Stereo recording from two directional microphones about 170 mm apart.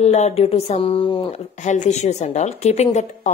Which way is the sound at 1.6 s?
45° left (ahead or behind).